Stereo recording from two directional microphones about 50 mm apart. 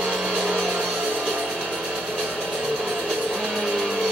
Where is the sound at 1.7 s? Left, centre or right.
Centre.